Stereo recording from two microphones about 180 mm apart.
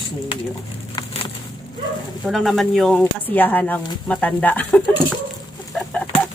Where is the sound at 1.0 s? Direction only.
25° left (ahead or behind).